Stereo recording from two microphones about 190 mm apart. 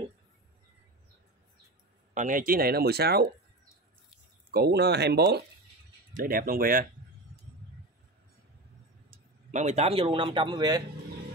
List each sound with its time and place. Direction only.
2.1 s speech: 45° right (ahead or behind)
4.5 s speech: 55° right (ahead or behind)
6.1 s speech: 50° right (ahead or behind)
9.5 s speech: 40° right (ahead or behind); by 10.8 s 25° right (ahead or behind)